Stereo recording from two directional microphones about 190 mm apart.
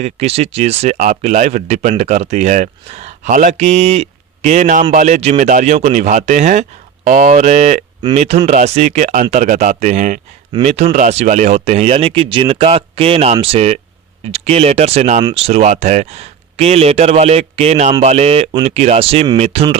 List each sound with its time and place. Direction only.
0.0 s speech: 35° right (ahead or behind)